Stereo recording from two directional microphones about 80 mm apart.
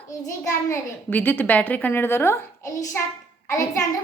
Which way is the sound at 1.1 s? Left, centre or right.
Left.